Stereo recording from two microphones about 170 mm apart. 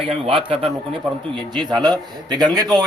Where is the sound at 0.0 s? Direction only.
30° right (ahead or behind).